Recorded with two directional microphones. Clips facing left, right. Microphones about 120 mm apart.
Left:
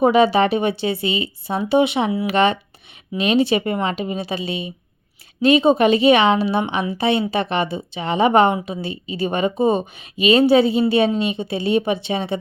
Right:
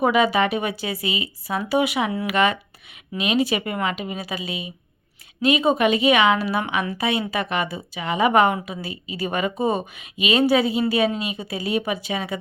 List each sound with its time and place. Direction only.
0.0 s a woman's voice: 30° left (ahead or behind)